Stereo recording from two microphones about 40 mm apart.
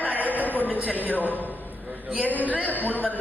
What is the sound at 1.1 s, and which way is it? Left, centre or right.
A man's voice, left.